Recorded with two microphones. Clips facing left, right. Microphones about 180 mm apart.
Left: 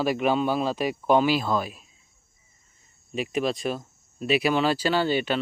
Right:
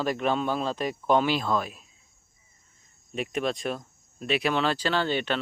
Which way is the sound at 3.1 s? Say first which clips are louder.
Left 2 dB; centre (ahead or behind).